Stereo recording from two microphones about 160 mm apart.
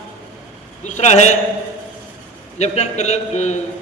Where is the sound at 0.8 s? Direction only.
45° left (ahead or behind).